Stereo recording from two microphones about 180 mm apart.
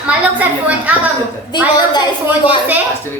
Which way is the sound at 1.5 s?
25° left (ahead or behind).